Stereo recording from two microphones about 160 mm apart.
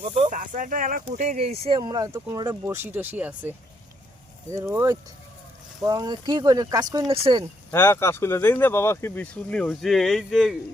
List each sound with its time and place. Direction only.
0.0 s speech: 45° right (ahead or behind); by 3.5 s 10° right (ahead or behind)
4.5 s speech: 15° right (ahead or behind); by 7.4 s 30° right (ahead or behind)
7.7 s speech: 15° left (ahead or behind); by 10.6 s centre (ahead or behind)